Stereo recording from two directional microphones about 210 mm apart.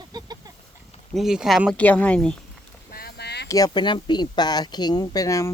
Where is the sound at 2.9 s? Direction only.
50° left (ahead or behind).